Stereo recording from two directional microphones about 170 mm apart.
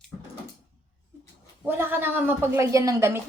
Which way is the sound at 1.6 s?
10° right (ahead or behind).